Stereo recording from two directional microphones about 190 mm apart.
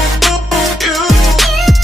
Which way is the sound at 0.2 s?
Centre (ahead or behind).